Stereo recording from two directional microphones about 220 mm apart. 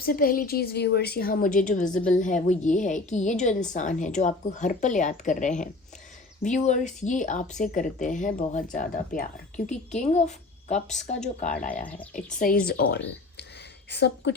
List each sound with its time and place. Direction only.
0.0 s a woman's voice: 40° left (ahead or behind)